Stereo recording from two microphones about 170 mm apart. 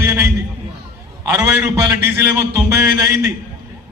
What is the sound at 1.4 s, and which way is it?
Speech, 10° right (ahead or behind).